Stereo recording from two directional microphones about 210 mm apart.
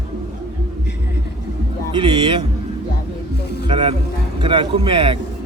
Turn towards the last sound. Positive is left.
turn(degrees=-25)  # may be behind; listen again after turning